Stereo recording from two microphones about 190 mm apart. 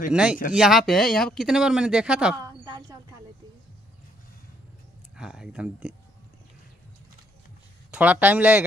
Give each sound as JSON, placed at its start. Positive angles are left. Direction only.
{"t": 0.1, "sound": "speech", "side_deg": -5}
{"t": 2.4, "sound": "a sound", "side_deg": -20}
{"t": 5.1, "sound": "speech", "side_deg": -5}
{"t": 7.9, "sound": "speech", "side_deg": -5}